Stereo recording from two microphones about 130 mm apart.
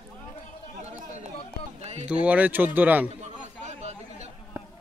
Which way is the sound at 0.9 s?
60° right (ahead or behind).